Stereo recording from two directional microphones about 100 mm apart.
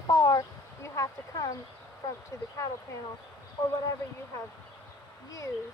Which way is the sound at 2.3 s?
30° left (ahead or behind).